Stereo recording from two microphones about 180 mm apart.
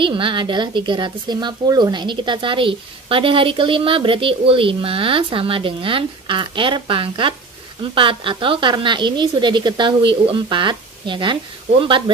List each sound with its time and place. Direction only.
0.0 s a woman's voice: 25° right (ahead or behind)